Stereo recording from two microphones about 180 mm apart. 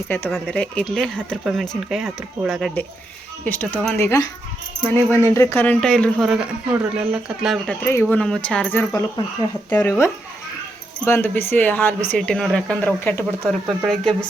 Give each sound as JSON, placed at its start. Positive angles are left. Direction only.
{"t": 0.3, "sound": "a man's voice", "side_deg": 0}
{"t": 8.9, "sound": "speech", "side_deg": 20}
{"t": 9.6, "sound": "a man's voice", "side_deg": 10}